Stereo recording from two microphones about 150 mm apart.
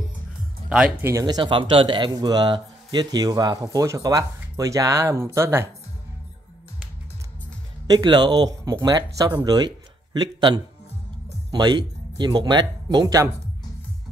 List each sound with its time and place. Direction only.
0.7 s speech: 5° right (ahead or behind)
1.2 s speech: 30° right (ahead or behind)
7.8 s speech: 30° right (ahead or behind)